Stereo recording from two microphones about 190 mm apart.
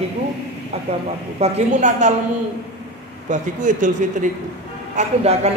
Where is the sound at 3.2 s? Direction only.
40° right (ahead or behind).